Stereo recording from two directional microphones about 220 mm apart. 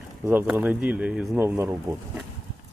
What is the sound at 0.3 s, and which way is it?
Speech, 10° right (ahead or behind).